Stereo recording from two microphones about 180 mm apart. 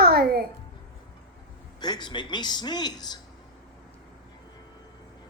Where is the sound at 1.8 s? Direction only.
25° left (ahead or behind).